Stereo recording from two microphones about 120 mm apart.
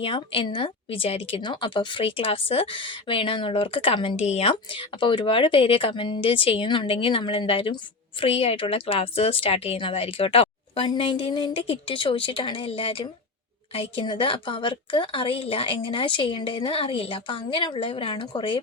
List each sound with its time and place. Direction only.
0.0 s a woman's voice: 45° left (ahead or behind)